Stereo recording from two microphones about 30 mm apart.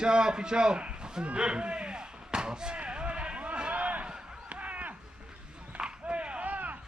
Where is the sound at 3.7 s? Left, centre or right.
Right.